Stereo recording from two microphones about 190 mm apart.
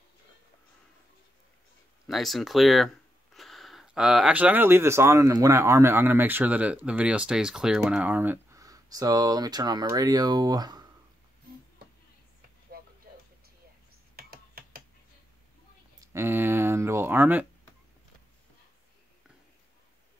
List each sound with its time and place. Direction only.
2.0 s speech: centre (ahead or behind); by 10.9 s 20° right (ahead or behind)
14.1 s a sound: 50° right (ahead or behind)
16.0 s speech: 15° right (ahead or behind)